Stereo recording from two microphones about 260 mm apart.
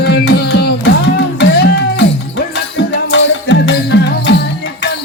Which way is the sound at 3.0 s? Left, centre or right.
Left.